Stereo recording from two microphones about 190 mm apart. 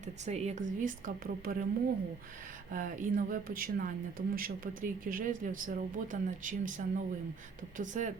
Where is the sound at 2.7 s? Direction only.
45° right (ahead or behind).